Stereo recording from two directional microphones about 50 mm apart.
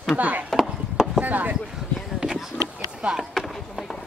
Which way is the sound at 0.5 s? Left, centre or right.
Centre.